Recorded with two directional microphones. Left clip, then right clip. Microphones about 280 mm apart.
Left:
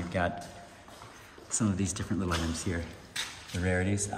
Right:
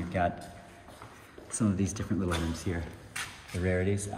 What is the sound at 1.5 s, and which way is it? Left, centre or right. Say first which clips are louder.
Speech: even; centre.